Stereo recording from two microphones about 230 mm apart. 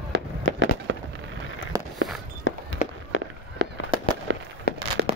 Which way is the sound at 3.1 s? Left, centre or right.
Left.